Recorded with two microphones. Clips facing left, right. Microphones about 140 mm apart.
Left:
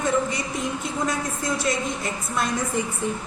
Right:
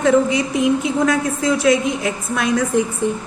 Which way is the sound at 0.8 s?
90° right.